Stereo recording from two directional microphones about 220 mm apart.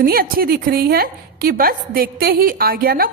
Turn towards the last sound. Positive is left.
turn(degrees=-40)  # may be behind; listen again after turning